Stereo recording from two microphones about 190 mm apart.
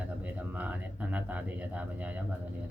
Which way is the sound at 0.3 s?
10° right (ahead or behind).